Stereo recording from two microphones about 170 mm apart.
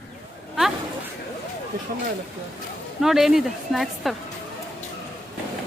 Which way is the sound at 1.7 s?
60° right (ahead or behind).